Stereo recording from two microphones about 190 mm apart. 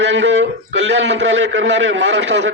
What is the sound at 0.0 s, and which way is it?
A man's voice, 70° right (ahead or behind).